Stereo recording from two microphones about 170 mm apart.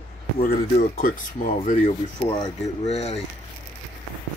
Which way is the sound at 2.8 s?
40° left (ahead or behind).